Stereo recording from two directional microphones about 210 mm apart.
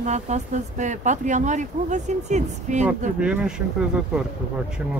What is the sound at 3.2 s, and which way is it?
Speech, 5° right (ahead or behind).